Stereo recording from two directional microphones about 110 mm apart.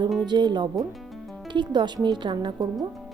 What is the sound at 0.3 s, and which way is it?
Speech, 45° right (ahead or behind).